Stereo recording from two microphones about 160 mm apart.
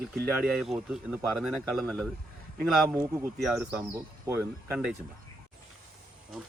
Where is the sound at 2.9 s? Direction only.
15° right (ahead or behind).